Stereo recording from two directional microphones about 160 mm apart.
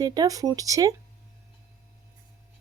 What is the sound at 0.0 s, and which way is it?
Speech, 25° right (ahead or behind).